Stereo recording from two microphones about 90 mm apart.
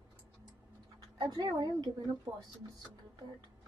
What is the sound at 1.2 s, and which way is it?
Speech, 50° right (ahead or behind).